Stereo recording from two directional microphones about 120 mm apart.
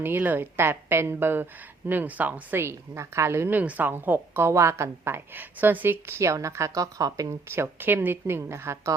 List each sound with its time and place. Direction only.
0.0 s a woman's voice: 15° right (ahead or behind)